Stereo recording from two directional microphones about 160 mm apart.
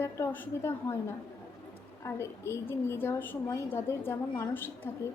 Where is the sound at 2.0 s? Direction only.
15° left (ahead or behind).